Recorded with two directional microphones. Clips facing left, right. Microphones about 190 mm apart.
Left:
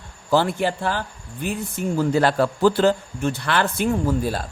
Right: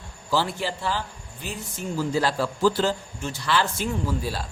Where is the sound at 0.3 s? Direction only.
55° left (ahead or behind).